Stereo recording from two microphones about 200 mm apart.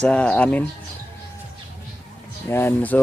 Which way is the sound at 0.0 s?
5° left (ahead or behind).